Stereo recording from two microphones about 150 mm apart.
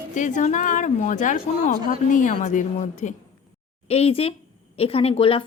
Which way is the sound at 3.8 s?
45° left (ahead or behind).